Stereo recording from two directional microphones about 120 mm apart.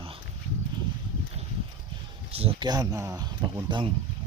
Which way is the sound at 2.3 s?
50° right (ahead or behind).